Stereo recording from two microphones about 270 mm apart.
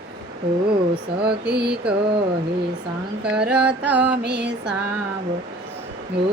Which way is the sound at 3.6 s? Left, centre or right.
Right.